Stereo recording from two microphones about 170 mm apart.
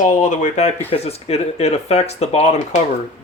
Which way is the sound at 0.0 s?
45° left (ahead or behind).